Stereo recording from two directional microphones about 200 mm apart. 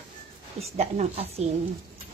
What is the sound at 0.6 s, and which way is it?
Speech, 30° right (ahead or behind).